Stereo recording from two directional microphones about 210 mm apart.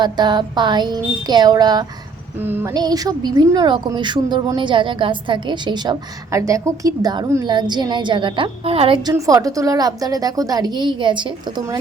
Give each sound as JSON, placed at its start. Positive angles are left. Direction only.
{"t": 0.0, "sound": "a woman's voice", "side_deg": -20}